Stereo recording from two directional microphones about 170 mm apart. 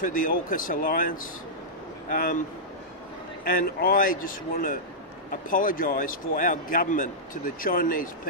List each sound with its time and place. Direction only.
0.0 s a man's voice: 55° left (ahead or behind)
3.4 s a man's voice: 60° left (ahead or behind)